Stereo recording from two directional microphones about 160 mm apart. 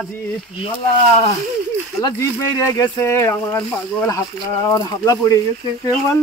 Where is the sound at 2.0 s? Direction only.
20° left (ahead or behind).